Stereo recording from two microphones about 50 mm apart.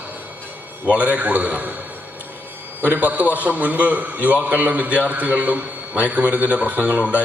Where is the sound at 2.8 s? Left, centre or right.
Right.